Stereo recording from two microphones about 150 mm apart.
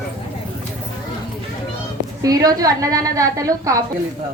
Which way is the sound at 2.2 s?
25° right (ahead or behind).